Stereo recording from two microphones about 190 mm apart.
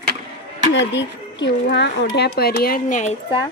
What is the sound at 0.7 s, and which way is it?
Speech, 70° left (ahead or behind).